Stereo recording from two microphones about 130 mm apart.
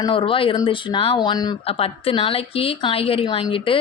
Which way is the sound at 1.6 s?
45° left (ahead or behind).